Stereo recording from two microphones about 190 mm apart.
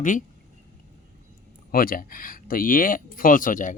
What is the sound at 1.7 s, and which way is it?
Speech, 50° left (ahead or behind).